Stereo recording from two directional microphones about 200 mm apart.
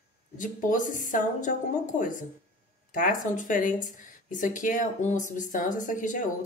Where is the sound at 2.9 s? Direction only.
40° left (ahead or behind).